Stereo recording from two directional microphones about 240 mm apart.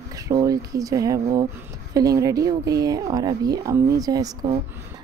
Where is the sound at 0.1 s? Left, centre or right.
Centre.